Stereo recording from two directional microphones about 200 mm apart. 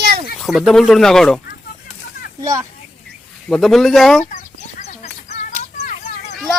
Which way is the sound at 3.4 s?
Centre (ahead or behind).